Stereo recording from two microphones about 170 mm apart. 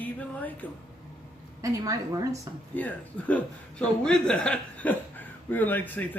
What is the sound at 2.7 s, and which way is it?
A man's voice, 10° left (ahead or behind).